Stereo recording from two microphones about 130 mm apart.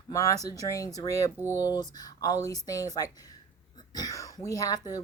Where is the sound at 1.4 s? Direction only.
15° right (ahead or behind).